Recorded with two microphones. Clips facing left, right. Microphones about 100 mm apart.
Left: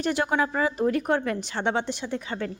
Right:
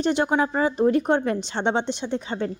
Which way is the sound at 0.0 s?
25° right (ahead or behind).